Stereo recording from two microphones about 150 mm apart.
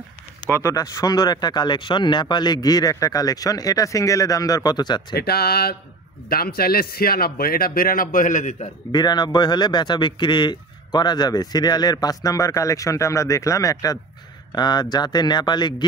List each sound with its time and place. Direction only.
0.5 s a man's voice: 20° left (ahead or behind)
5.1 s a man's voice: 90° left; by 8.6 s 55° left (ahead or behind)
8.9 s a man's voice: 30° left (ahead or behind)